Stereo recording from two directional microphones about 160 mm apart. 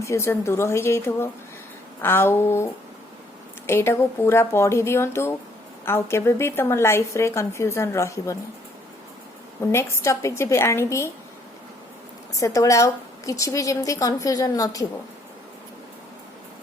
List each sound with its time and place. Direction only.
0.0 s a woman's voice: 20° left (ahead or behind)
3.7 s a woman's voice: 15° left (ahead or behind)
9.6 s a woman's voice: 15° left (ahead or behind)
12.4 s a woman's voice: 20° left (ahead or behind)